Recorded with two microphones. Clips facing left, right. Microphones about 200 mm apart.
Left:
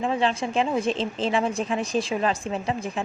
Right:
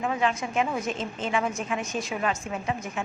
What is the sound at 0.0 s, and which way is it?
A woman's voice, 30° left (ahead or behind).